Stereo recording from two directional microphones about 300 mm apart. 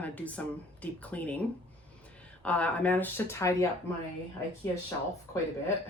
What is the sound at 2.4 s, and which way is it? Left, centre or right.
Speech, centre.